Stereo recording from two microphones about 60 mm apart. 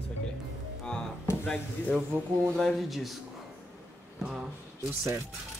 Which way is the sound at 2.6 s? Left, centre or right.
Centre.